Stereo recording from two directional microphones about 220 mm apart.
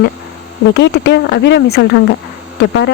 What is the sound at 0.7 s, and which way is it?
Speech, 50° left (ahead or behind).